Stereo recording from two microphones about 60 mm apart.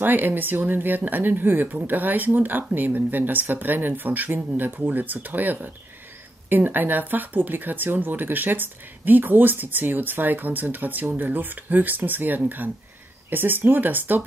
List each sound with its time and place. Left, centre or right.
0.0 s speech: right